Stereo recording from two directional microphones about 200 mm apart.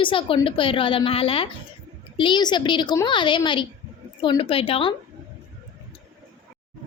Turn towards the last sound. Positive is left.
turn(degrees=25)  # may be behind; listen again after turning